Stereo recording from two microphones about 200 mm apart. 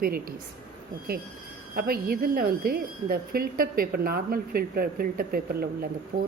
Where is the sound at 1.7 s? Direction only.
50° right (ahead or behind).